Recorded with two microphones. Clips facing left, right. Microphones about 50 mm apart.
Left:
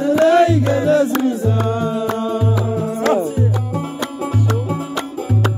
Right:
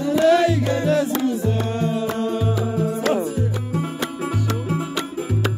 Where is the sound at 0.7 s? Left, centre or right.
Left.